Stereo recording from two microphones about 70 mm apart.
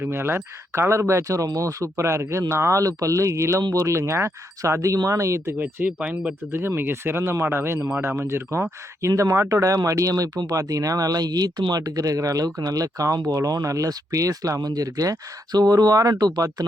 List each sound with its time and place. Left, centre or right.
0.0 s speech: right
5.5 s speech: right
6.5 s speech: right